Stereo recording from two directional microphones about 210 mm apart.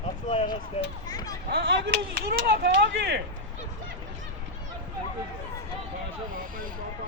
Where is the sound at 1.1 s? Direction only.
20° left (ahead or behind).